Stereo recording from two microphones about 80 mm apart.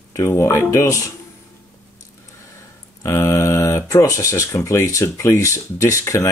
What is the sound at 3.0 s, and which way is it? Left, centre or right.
Speech, left.